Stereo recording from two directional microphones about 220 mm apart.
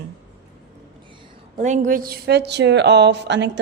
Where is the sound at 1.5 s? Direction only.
35° right (ahead or behind); by 3.6 s 55° right (ahead or behind).